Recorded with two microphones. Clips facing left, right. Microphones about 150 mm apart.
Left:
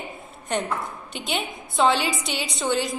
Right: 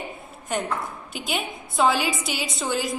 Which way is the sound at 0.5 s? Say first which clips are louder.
Left 1 dB; 5° right (ahead or behind).